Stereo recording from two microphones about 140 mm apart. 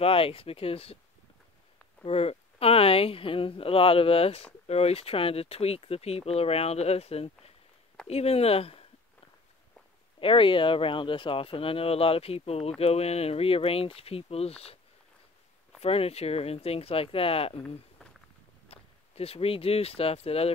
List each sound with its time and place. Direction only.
0.0 s speech: 40° left (ahead or behind)
2.0 s speech: 45° left (ahead or behind)
10.2 s speech: 35° left (ahead or behind)
15.8 s speech: 45° left (ahead or behind)
18.7 s speech: 45° left (ahead or behind)